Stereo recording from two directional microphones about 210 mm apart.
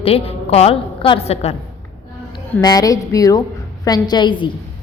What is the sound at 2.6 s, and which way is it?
A woman's voice, 20° left (ahead or behind).